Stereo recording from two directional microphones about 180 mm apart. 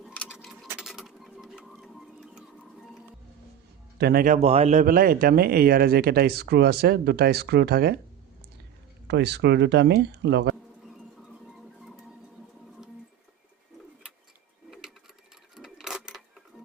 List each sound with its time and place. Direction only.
0.0 s a sound: 5° left (ahead or behind)
3.9 s a man's voice: 60° right (ahead or behind)
4.4 s speech: 35° right (ahead or behind); by 7.9 s 60° right (ahead or behind)
9.0 s speech: 70° right (ahead or behind)
14.7 s a sound: centre (ahead or behind)
15.5 s sewing machine: 5° right (ahead or behind)